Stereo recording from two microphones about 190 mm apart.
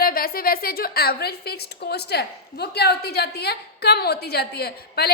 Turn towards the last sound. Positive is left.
turn(degrees=55)  # may be behind; listen again after turning